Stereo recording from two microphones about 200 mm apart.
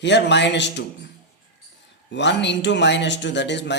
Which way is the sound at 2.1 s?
60° left (ahead or behind).